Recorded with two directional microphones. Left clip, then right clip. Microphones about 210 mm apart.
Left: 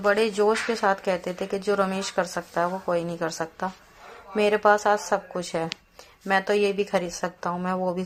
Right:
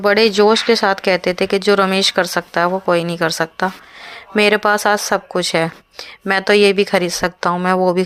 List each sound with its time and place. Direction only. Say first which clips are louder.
0.0 s speech: right 9 dB; 45° right (ahead or behind)